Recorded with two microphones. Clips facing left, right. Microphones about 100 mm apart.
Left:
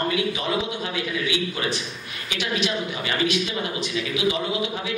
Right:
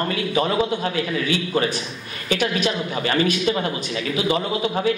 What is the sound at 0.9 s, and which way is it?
A man's voice, 45° right (ahead or behind).